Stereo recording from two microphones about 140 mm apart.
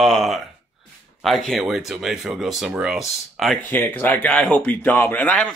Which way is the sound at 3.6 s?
15° left (ahead or behind).